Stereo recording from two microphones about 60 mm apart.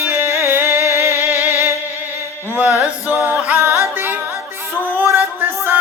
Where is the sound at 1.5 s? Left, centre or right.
Left.